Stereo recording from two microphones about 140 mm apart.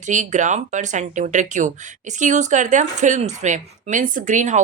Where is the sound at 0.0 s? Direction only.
60° right (ahead or behind).